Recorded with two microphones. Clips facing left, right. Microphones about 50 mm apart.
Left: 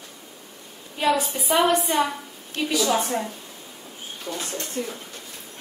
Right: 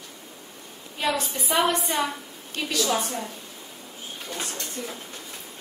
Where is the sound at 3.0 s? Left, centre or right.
Centre.